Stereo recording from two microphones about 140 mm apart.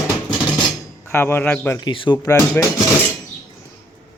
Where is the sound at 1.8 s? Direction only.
35° left (ahead or behind).